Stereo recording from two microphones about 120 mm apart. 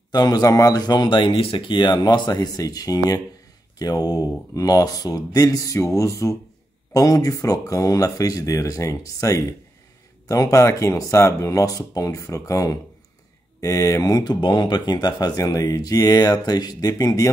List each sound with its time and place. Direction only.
0.1 s speech: 35° left (ahead or behind)